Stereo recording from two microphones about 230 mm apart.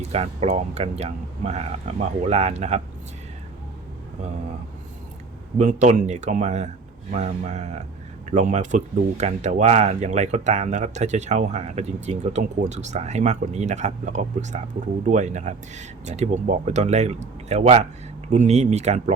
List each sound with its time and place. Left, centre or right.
0.0 s speech: right
5.5 s speech: right